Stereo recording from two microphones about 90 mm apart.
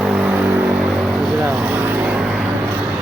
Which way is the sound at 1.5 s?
10° right (ahead or behind).